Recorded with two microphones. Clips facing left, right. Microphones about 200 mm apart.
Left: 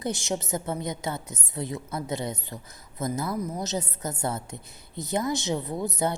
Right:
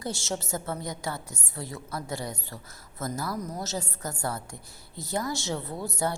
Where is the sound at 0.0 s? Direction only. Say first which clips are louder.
Left 3 dB; 15° left (ahead or behind).